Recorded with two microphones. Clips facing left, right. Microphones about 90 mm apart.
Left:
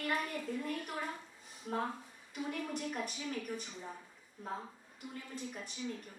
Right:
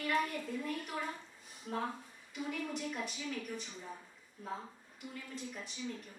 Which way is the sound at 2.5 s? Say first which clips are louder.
Even; 45° left (ahead or behind).